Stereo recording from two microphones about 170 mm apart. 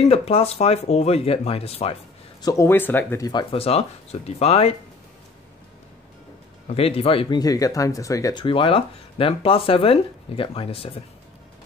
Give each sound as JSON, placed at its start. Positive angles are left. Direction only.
{"t": 0.0, "sound": "speech", "side_deg": 35}
{"t": 2.4, "sound": "speech", "side_deg": 15}
{"t": 3.5, "sound": "speech", "side_deg": 35}
{"t": 6.7, "sound": "speech", "side_deg": 35}